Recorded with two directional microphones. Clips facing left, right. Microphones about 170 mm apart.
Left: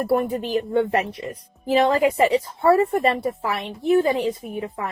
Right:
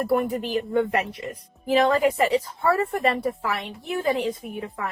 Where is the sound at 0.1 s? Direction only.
35° left (ahead or behind).